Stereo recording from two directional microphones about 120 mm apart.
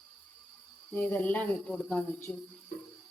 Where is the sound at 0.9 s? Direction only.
15° left (ahead or behind).